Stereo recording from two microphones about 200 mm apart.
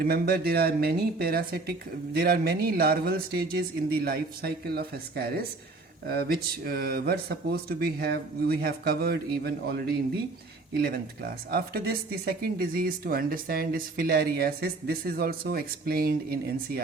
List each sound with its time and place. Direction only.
0.0 s speech: 50° right (ahead or behind)